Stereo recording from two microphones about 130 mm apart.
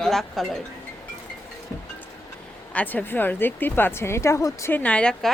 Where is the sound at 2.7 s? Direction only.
10° left (ahead or behind).